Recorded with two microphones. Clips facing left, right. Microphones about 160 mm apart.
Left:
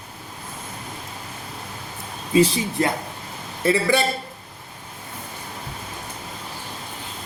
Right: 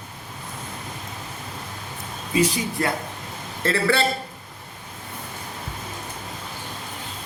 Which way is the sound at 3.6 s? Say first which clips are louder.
Left 2 dB; 15° left (ahead or behind).